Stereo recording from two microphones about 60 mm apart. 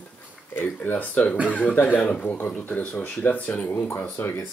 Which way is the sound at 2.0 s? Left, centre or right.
Centre.